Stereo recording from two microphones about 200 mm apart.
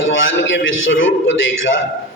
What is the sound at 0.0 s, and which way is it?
A man's voice, 65° left (ahead or behind).